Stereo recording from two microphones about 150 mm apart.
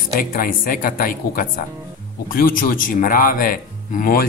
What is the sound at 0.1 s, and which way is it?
Speech, 70° left (ahead or behind).